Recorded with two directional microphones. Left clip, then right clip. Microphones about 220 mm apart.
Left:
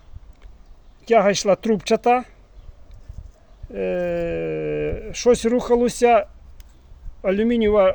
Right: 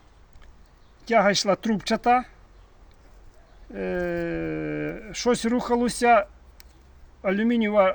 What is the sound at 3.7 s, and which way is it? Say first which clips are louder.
Speech: left 5 dB; 30° left (ahead or behind).